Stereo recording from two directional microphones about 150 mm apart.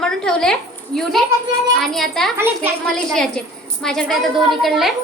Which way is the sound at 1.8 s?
Centre (ahead or behind).